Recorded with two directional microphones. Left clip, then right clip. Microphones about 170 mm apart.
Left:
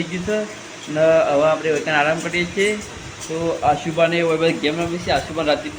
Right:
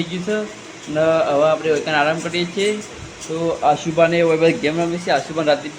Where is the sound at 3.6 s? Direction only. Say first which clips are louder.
Right 2 dB; 30° right (ahead or behind).